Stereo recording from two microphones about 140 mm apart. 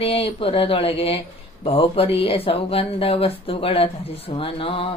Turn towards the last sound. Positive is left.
turn(degrees=40)  # may be behind; listen again after turning